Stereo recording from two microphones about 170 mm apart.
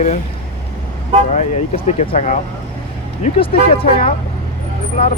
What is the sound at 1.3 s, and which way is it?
Speech, 45° left (ahead or behind).